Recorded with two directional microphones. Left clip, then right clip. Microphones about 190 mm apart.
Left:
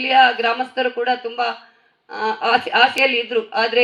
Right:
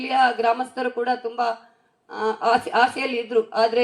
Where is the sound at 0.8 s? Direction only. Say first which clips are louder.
Left 2 dB; 40° right (ahead or behind).